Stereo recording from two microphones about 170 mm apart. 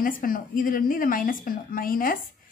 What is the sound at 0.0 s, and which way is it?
A woman's voice, 55° left (ahead or behind).